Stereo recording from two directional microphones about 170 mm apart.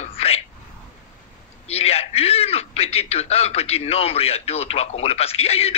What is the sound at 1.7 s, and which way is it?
A man's voice, 35° left (ahead or behind).